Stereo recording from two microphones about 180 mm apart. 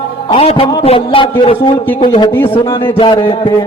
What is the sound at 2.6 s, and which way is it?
A man's voice, 25° left (ahead or behind).